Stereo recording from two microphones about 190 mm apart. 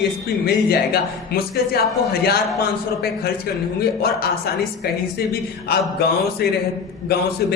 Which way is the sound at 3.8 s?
55° left (ahead or behind).